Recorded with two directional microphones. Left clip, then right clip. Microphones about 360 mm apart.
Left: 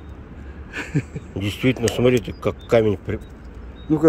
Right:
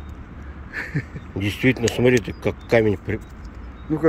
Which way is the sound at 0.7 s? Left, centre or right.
Left.